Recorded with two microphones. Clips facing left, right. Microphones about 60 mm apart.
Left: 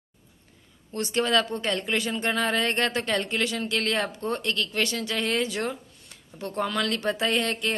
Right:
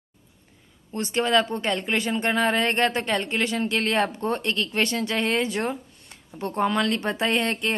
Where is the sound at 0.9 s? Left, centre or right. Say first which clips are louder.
Right 2 dB; right.